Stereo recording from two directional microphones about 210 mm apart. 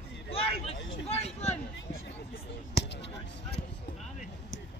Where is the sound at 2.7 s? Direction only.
50° left (ahead or behind).